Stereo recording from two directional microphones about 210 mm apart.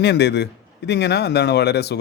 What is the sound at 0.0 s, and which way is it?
Speech, 55° left (ahead or behind).